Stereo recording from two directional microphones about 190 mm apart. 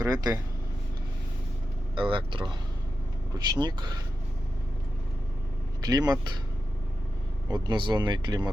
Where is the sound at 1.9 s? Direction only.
25° right (ahead or behind).